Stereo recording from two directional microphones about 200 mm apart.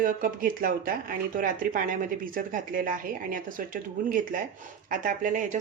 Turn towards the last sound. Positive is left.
turn(degrees=-40)  # may be behind; listen again after turning